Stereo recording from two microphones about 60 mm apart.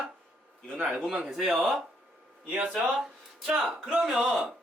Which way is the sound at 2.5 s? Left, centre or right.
Right.